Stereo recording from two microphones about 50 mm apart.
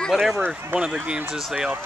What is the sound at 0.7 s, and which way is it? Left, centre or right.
Speech, right.